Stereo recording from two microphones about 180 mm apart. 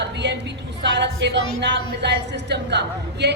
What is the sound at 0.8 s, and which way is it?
A woman's voice, 75° right (ahead or behind).